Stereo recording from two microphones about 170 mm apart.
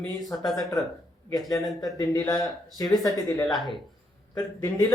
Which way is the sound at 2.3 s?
20° left (ahead or behind).